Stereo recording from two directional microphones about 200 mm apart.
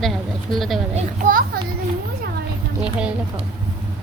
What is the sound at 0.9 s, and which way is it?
Speech, 40° right (ahead or behind).